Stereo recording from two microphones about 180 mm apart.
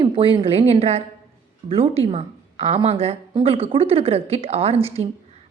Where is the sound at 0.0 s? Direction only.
30° right (ahead or behind).